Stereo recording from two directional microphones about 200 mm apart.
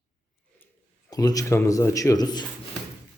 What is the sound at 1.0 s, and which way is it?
A man's voice, 15° left (ahead or behind).